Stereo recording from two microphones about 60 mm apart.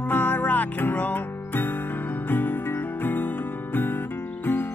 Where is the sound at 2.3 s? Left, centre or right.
Left.